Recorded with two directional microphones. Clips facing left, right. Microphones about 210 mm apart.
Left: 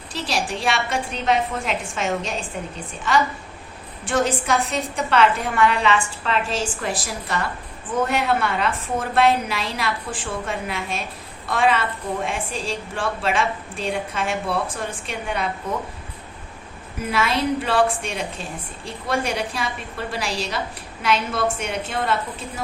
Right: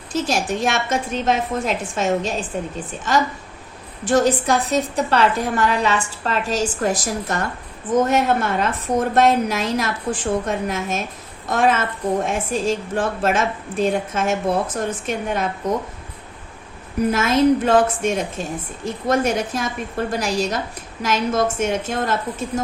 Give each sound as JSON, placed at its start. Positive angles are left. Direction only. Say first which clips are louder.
{"t": 0.1, "sound": "a woman's voice", "louder": "right 5 dB", "side_deg": -45}
{"t": 4.1, "sound": "a woman's voice", "louder": "right 4 dB", "side_deg": -35}
{"t": 17.0, "sound": "a woman's voice", "louder": "right 6 dB", "side_deg": -45}